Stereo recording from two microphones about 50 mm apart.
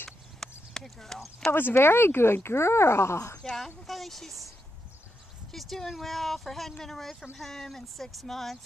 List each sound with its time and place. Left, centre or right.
0.4 s clip-clop: centre
1.5 s speech: left
3.4 s speech: centre
5.5 s speech: centre